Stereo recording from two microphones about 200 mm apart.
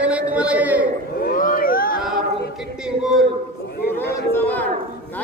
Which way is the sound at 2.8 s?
5° right (ahead or behind).